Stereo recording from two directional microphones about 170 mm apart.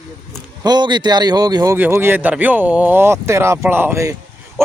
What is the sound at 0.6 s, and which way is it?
A man's voice, 25° right (ahead or behind).